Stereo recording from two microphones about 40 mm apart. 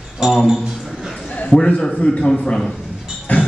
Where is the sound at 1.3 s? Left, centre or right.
Left.